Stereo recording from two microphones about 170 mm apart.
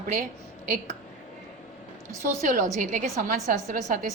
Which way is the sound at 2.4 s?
45° right (ahead or behind).